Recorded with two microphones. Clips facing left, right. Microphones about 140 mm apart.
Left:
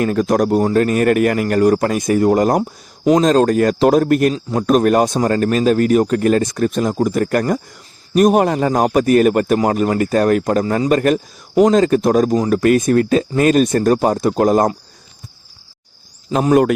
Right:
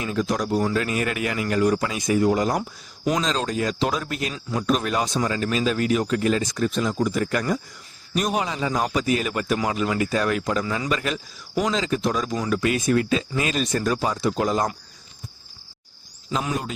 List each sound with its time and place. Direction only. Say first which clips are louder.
0.0 s speech: left 9 dB; 55° left (ahead or behind)
16.5 s a man's voice: left 16 dB; 65° left (ahead or behind)